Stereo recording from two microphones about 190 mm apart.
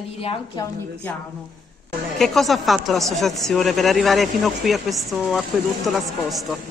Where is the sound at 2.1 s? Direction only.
Centre (ahead or behind).